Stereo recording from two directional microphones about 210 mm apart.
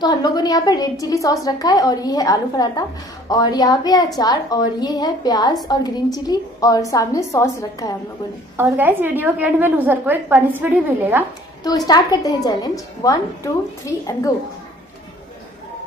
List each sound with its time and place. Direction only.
0.0 s a woman's voice: 20° left (ahead or behind)
8.6 s a woman's voice: 10° right (ahead or behind)
11.6 s a woman's voice: 20° left (ahead or behind)